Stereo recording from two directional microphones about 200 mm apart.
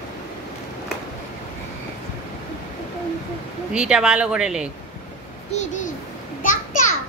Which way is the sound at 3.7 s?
5° right (ahead or behind).